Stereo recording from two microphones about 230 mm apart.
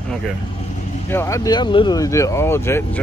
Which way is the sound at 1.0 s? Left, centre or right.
Centre.